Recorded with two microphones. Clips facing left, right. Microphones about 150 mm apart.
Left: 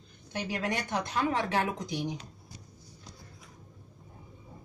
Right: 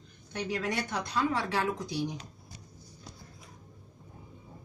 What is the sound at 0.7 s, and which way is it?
Speech, 20° left (ahead or behind).